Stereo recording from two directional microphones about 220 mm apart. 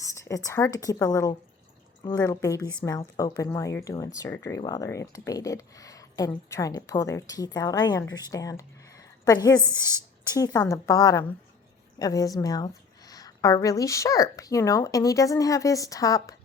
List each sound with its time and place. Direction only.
0.0 s a woman's voice: 15° left (ahead or behind)